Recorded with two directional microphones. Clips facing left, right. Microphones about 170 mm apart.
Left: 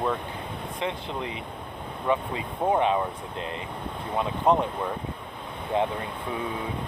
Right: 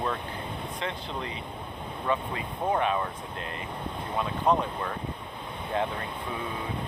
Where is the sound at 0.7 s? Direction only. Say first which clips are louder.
Left 5 dB; 15° left (ahead or behind).